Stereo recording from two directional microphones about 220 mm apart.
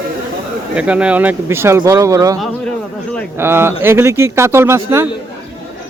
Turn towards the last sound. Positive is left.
turn(degrees=-10)  # may be behind; listen again after turning